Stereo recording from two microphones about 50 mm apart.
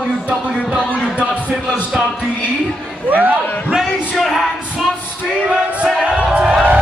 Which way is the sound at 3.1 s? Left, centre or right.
Right.